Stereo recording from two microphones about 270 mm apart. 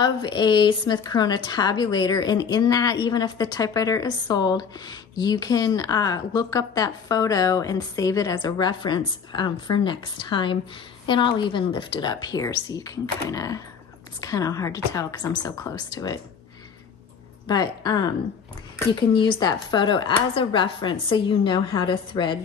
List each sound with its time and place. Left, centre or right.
0.0 s a woman's voice: centre
17.5 s a woman's voice: centre